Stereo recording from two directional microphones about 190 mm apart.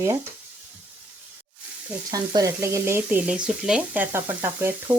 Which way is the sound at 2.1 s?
20° right (ahead or behind).